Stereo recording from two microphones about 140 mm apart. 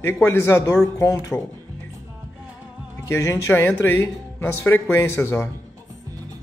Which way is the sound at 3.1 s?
20° left (ahead or behind).